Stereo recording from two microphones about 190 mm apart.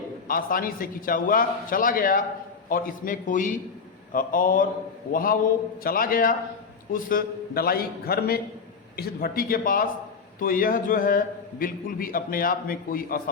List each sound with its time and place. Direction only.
0.3 s a man's voice: 50° left (ahead or behind)